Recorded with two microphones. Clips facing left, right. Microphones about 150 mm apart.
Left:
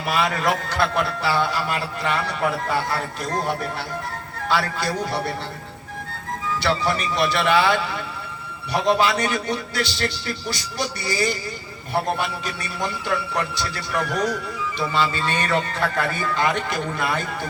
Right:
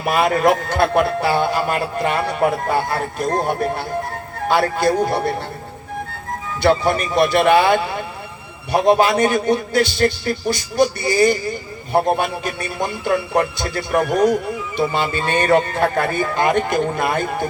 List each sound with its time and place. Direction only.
0.0 s a man's voice: 50° right (ahead or behind)
6.6 s a man's voice: 50° right (ahead or behind)